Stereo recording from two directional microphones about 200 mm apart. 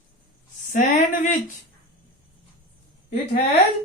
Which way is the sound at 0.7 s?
40° left (ahead or behind).